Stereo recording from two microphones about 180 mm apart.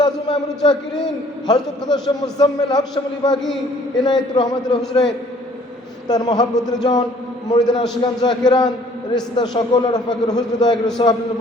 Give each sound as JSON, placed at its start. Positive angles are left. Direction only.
{"t": 0.0, "sound": "a man's voice", "side_deg": 25}
{"t": 3.4, "sound": "a man's voice", "side_deg": 0}
{"t": 4.0, "sound": "a man's voice", "side_deg": 25}
{"t": 6.1, "sound": "a man's voice", "side_deg": 20}